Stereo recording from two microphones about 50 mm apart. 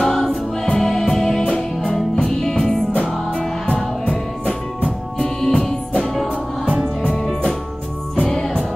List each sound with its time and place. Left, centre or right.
0.0 s choir: centre
0.7 s music: centre
2.9 s music: left
5.2 s music: centre
7.1 s music: centre
8.2 s music: centre